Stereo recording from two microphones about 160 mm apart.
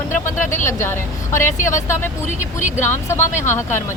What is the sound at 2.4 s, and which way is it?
Speech, 50° left (ahead or behind).